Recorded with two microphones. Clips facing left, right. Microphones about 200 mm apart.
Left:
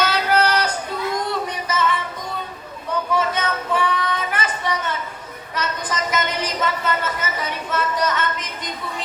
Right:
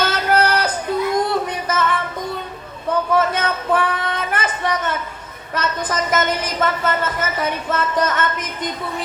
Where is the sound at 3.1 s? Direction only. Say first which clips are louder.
Right 2 dB; 50° right (ahead or behind).